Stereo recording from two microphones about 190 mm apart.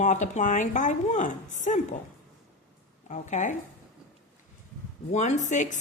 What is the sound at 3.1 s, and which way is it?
Speech, 40° left (ahead or behind).